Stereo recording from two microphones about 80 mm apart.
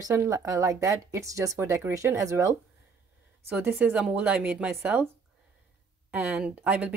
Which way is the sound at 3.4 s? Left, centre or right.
Right.